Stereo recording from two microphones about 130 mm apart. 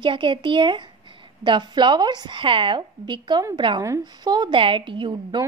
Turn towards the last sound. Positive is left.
turn(degrees=-35)  # may be behind; listen again after turning